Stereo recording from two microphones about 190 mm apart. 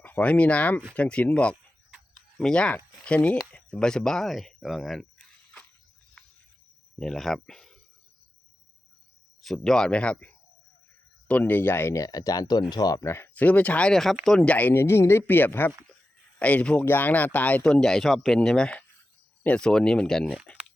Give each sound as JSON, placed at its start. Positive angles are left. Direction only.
{"t": 0.0, "sound": "speech", "side_deg": 10}
{"t": 6.2, "sound": "music", "side_deg": 5}
{"t": 7.0, "sound": "speech", "side_deg": 0}
{"t": 9.4, "sound": "speech", "side_deg": 0}